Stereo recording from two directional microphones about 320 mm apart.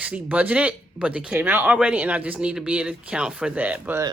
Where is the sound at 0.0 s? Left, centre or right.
Centre.